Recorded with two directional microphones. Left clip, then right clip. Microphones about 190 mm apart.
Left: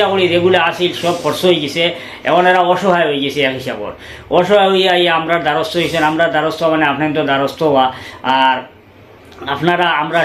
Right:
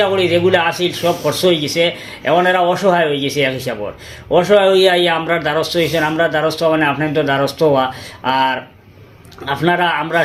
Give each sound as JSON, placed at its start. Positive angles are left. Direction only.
{"t": 0.0, "sound": "a man's voice", "side_deg": -45}